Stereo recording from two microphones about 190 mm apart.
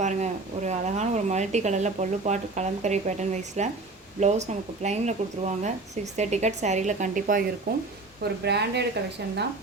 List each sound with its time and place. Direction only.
0.0 s speech: 40° right (ahead or behind)
8.2 s a woman's voice: 60° right (ahead or behind)